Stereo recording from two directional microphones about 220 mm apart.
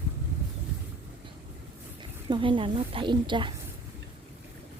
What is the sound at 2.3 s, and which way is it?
A woman's voice, 20° right (ahead or behind).